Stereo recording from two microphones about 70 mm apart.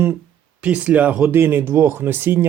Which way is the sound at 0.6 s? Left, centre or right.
Centre.